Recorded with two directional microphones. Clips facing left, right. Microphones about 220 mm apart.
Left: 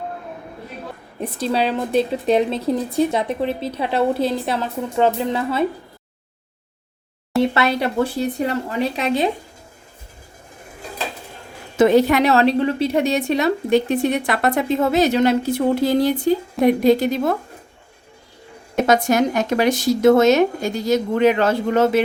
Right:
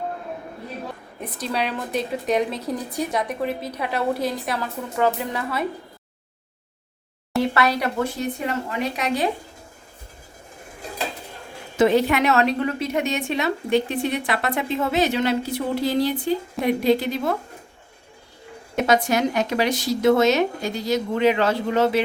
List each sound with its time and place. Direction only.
1.2 s speech: 30° left (ahead or behind)
7.5 s speech: 25° left (ahead or behind)
11.8 s a woman's voice: 45° left (ahead or behind)
18.9 s speech: 45° left (ahead or behind)